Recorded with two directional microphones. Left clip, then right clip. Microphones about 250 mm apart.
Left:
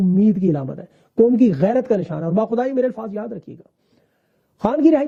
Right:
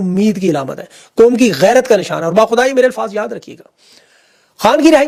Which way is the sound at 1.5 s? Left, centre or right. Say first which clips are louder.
Right 9 dB; centre.